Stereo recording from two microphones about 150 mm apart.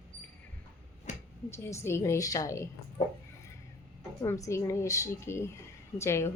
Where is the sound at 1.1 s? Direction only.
55° left (ahead or behind).